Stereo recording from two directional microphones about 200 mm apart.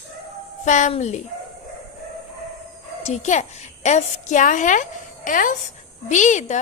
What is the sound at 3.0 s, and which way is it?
A woman's voice, 35° left (ahead or behind).